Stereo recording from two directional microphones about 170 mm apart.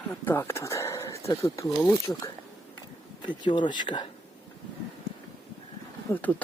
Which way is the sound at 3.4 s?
25° left (ahead or behind).